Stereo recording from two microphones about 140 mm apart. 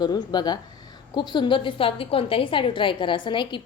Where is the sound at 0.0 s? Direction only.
30° left (ahead or behind).